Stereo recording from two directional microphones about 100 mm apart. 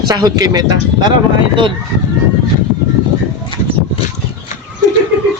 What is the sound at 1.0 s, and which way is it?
Speech, 55° right (ahead or behind).